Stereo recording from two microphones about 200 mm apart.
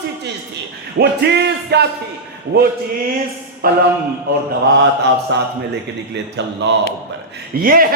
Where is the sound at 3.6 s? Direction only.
45° right (ahead or behind).